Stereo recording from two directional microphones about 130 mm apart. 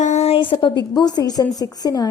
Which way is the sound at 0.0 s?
60° left (ahead or behind).